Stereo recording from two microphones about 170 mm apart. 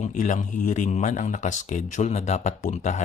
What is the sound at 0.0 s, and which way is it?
Speech, 45° left (ahead or behind).